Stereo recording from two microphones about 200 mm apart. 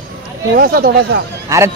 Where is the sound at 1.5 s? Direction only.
15° right (ahead or behind).